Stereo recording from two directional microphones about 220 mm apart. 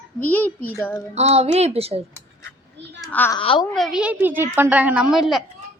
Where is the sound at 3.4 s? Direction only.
25° left (ahead or behind).